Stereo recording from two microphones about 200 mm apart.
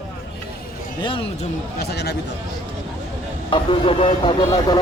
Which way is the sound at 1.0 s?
25° left (ahead or behind).